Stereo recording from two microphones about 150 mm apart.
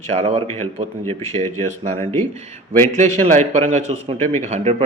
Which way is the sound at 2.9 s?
50° right (ahead or behind).